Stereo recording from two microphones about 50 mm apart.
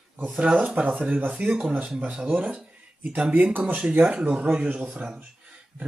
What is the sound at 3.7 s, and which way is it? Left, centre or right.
Speech, right.